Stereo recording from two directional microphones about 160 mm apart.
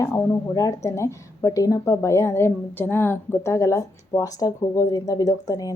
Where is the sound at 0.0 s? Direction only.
20° left (ahead or behind).